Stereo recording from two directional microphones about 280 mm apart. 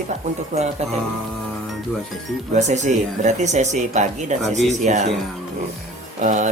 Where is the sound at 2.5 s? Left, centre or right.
Right.